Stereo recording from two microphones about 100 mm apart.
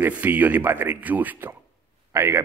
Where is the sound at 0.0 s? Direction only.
20° right (ahead or behind).